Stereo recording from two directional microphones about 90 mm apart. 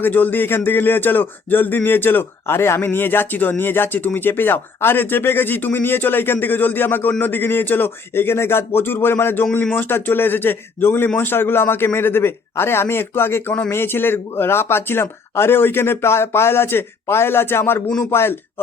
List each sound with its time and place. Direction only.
0.0 s speech: 20° left (ahead or behind)